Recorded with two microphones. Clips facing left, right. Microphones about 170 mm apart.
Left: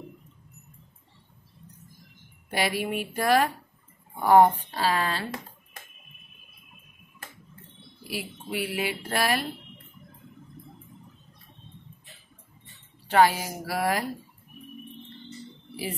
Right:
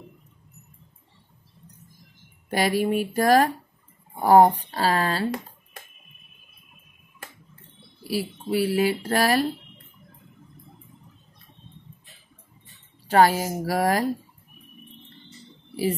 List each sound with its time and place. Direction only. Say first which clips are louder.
2.5 s speech: right 5 dB; 40° right (ahead or behind)
8.1 s speech: right 8 dB; 35° right (ahead or behind)
13.1 s a woman's voice: right 3 dB; 45° right (ahead or behind)